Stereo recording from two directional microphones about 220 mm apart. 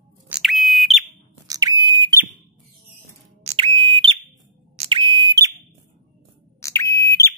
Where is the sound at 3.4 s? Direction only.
25° right (ahead or behind).